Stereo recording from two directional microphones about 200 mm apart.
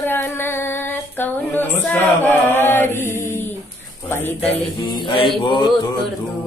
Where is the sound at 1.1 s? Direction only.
10° left (ahead or behind).